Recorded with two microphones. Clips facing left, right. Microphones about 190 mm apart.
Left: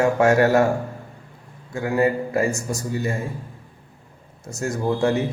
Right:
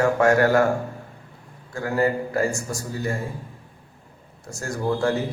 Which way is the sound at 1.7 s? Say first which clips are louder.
Left 2 dB; 20° left (ahead or behind).